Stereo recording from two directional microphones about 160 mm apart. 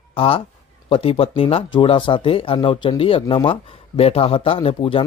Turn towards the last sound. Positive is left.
turn(degrees=35)  # may be behind; listen again after turning